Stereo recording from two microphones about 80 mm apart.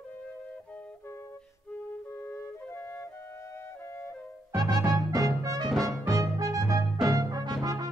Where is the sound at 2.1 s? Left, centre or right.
Left.